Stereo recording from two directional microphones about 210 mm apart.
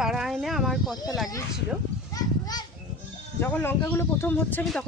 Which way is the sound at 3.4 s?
10° left (ahead or behind).